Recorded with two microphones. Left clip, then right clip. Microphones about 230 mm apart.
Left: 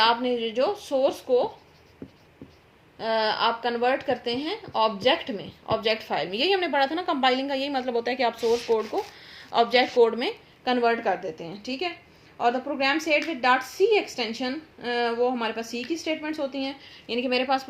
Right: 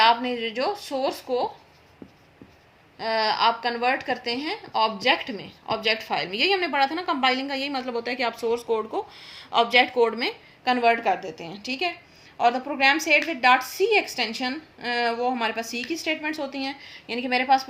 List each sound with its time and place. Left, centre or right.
0.0 s speech: right
3.0 s speech: right